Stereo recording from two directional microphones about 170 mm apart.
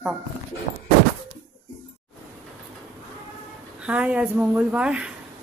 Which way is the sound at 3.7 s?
5° right (ahead or behind).